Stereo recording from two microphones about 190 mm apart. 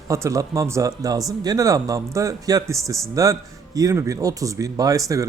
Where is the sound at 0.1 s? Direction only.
15° right (ahead or behind).